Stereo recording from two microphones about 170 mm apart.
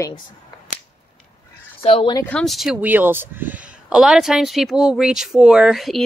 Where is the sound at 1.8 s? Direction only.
35° left (ahead or behind).